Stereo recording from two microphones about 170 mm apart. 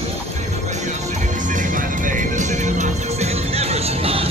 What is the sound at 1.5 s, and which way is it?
Music, 50° right (ahead or behind).